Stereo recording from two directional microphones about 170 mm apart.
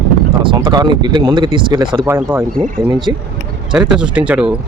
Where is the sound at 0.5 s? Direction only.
25° right (ahead or behind).